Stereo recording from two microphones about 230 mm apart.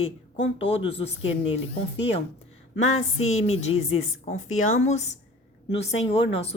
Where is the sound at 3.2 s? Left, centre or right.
Left.